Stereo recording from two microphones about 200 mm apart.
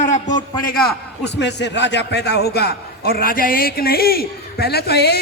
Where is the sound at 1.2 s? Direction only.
60° left (ahead or behind).